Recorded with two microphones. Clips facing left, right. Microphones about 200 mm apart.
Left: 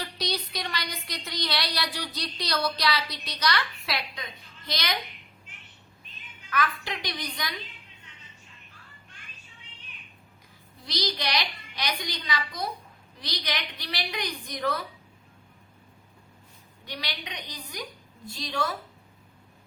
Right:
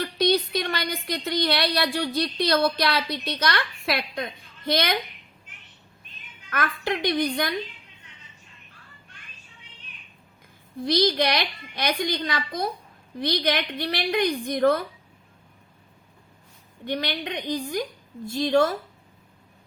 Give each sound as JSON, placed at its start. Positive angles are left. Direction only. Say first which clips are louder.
{"t": 0.0, "sound": "speech", "louder": "right 10 dB", "side_deg": -55}
{"t": 6.5, "sound": "a woman's voice", "louder": "right 3 dB", "side_deg": -55}
{"t": 10.8, "sound": "a woman's voice", "louder": "right 11 dB", "side_deg": -50}
{"t": 16.8, "sound": "a woman's voice", "louder": "right 10 dB", "side_deg": -55}